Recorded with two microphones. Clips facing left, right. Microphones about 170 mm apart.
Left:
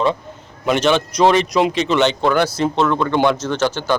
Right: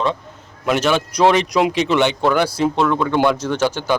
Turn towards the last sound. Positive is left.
turn(degrees=-10)  # may be behind; listen again after turning